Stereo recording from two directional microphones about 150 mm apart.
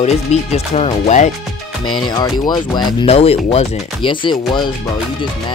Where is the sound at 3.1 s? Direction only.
45° left (ahead or behind).